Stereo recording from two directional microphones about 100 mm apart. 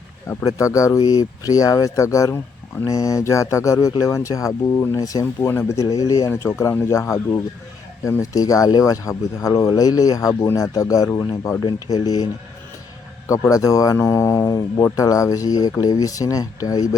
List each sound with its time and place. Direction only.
0.3 s speech: 35° left (ahead or behind)
5.2 s speech: 20° left (ahead or behind)
5.7 s speech: 35° left (ahead or behind)
11.6 s speech: 45° left (ahead or behind)
13.5 s speech: 35° left (ahead or behind)